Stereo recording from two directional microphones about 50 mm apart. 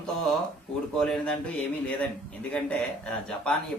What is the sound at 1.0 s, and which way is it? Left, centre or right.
Speech, centre.